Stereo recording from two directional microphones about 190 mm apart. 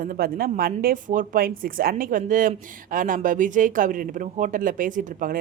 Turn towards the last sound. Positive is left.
turn(degrees=-45)  # may be behind; listen again after turning